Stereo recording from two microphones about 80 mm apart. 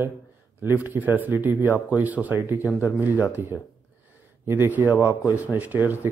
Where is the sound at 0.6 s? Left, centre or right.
Right.